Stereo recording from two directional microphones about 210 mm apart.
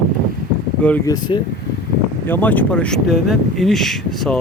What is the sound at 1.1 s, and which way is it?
Speech, 20° left (ahead or behind).